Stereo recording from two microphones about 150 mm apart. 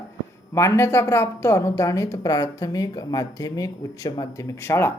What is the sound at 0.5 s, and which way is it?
A woman's voice, 20° left (ahead or behind).